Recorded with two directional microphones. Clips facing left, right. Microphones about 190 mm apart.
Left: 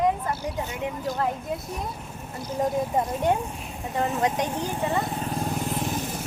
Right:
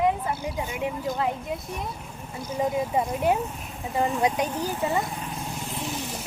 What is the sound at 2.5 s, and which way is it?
Speech, 10° right (ahead or behind).